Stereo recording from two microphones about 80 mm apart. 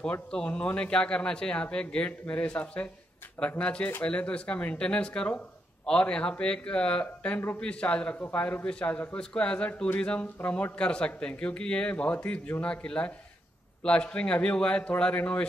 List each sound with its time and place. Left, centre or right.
0.0 s a man's voice: centre
7.6 s a man's voice: centre